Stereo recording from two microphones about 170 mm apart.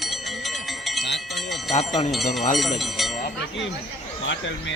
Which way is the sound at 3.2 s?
90° left.